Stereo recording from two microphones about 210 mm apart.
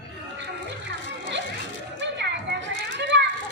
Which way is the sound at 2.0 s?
55° right (ahead or behind).